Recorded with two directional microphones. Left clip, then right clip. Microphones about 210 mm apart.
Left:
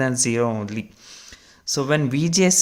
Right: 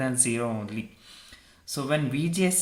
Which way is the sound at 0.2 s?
40° left (ahead or behind).